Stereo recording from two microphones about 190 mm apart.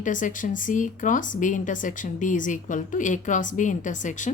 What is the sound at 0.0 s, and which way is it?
A woman's voice, 45° left (ahead or behind).